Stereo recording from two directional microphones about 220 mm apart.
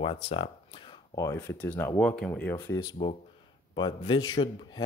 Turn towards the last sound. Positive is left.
turn(degrees=20)  # may be behind; listen again after turning